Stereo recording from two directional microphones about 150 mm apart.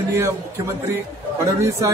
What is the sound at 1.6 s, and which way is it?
Speech, 20° right (ahead or behind).